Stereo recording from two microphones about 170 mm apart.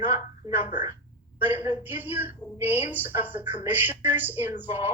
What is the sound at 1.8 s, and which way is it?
A woman's voice, 10° right (ahead or behind).